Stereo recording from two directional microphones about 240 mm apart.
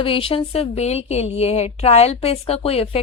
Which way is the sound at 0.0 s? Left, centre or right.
Left.